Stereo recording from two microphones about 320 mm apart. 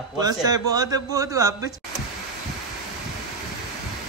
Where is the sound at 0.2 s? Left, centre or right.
Centre.